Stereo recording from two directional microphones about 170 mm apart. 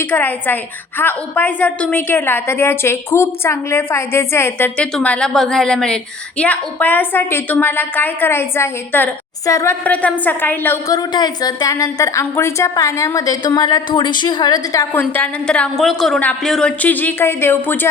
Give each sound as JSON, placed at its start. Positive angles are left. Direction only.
{"t": 0.0, "sound": "a woman's voice", "side_deg": 10}